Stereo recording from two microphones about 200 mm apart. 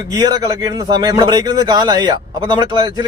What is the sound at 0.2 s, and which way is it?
A man's voice, 20° right (ahead or behind).